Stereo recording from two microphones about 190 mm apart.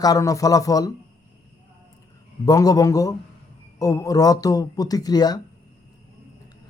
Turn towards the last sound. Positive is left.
turn(degrees=20)  # may be behind; listen again after turning